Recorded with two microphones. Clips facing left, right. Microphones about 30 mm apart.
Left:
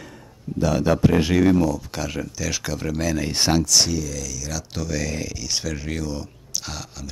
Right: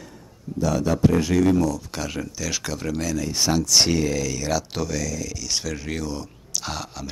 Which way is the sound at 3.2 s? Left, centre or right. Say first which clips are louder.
Left 2 dB; left.